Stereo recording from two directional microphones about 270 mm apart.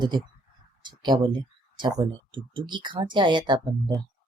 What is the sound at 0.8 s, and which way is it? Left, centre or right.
Speech, centre.